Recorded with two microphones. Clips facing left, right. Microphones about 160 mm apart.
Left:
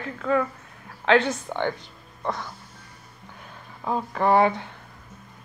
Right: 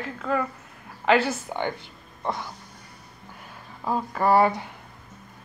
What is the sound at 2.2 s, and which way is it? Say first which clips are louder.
Music: even; 15° right (ahead or behind).